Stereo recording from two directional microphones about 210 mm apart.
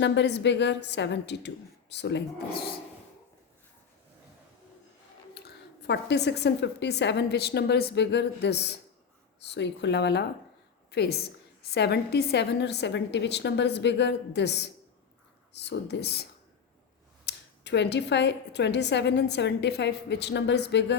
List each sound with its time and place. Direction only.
0.0 s a woman's voice: 55° left (ahead or behind)
5.3 s a woman's voice: 50° left (ahead or behind)
17.2 s a woman's voice: 55° left (ahead or behind)